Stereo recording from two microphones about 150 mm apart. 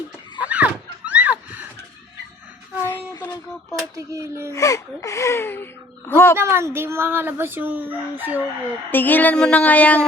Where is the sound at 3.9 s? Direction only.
20° right (ahead or behind).